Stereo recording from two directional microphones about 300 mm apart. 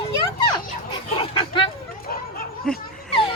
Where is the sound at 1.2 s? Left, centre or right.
Centre.